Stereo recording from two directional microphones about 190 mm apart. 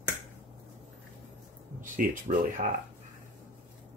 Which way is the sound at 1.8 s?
45° right (ahead or behind).